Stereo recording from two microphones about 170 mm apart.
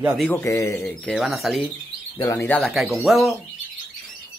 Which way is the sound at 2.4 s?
5° left (ahead or behind).